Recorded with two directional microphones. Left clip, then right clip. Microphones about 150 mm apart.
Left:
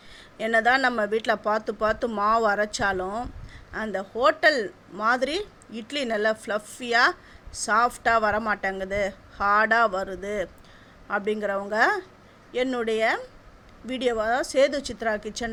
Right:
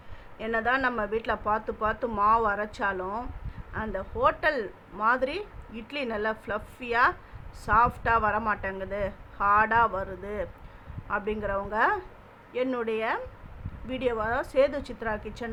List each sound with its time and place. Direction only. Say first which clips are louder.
0.3 s a woman's voice: left 6 dB; 35° left (ahead or behind)